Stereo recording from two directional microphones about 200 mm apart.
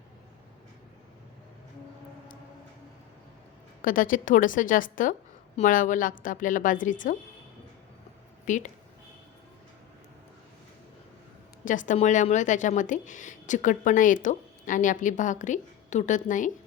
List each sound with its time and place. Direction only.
3.8 s speech: 40° left (ahead or behind)
8.4 s speech: 40° left (ahead or behind)
11.6 s speech: 40° left (ahead or behind)